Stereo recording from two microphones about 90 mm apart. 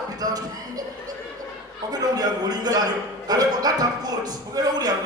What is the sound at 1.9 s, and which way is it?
Speech, 45° right (ahead or behind).